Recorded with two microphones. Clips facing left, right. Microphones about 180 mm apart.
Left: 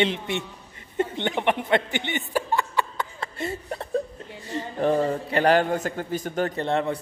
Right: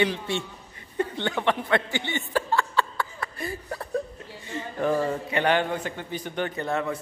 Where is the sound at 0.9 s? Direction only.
20° left (ahead or behind).